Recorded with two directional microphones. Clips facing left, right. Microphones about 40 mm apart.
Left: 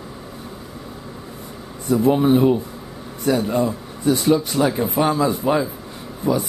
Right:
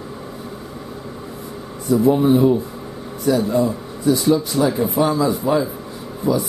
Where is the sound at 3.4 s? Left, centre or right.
Left.